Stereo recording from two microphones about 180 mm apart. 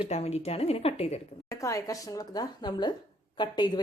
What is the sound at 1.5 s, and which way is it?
A woman's voice, 15° left (ahead or behind).